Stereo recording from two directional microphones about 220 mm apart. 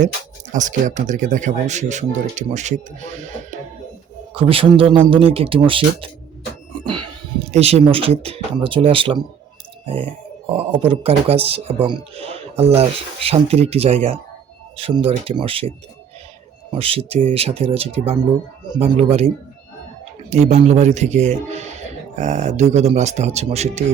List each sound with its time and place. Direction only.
0.5 s speech: 35° right (ahead or behind)
4.4 s speech: 25° right (ahead or behind)
7.5 s speech: 30° right (ahead or behind)
16.7 s speech: 25° right (ahead or behind)
20.3 s speech: 30° right (ahead or behind)